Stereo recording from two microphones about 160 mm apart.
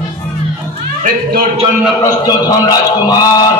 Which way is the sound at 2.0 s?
25° left (ahead or behind).